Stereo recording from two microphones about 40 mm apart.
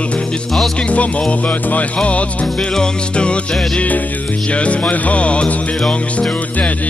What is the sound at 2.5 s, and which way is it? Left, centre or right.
Music, centre.